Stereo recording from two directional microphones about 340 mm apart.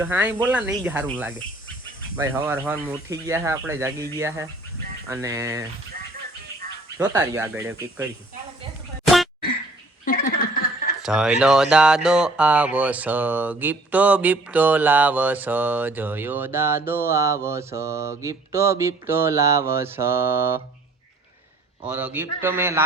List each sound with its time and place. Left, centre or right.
0.0 s speech: centre
7.0 s speech: centre
9.0 s a sound: centre
10.1 s a sound: left
11.0 s speech: centre
21.8 s speech: centre